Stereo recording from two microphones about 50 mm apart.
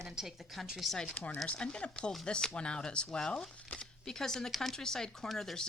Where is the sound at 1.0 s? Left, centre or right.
Left.